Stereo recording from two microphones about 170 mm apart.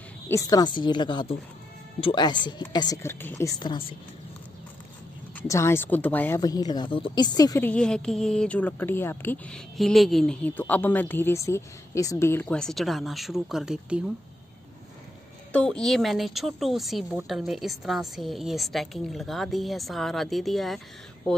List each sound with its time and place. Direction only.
0.3 s a woman's voice: 20° left (ahead or behind)
5.5 s a woman's voice: 15° left (ahead or behind)
6.4 s a woman's voice: 20° left (ahead or behind)
7.6 s a woman's voice: 5° left (ahead or behind)
9.8 s a woman's voice: centre (ahead or behind)
15.5 s a woman's voice: 5° left (ahead or behind)